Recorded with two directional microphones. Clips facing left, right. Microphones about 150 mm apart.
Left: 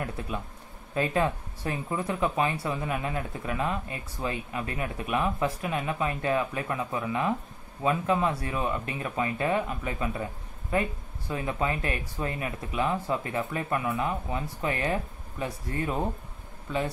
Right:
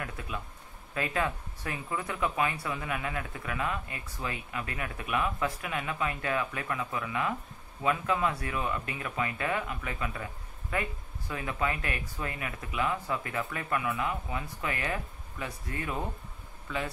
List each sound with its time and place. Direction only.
0.9 s speech: 30° left (ahead or behind)